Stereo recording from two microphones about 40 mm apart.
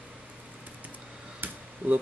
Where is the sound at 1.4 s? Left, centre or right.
Right.